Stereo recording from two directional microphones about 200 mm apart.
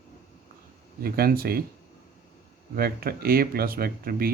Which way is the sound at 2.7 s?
50° right (ahead or behind).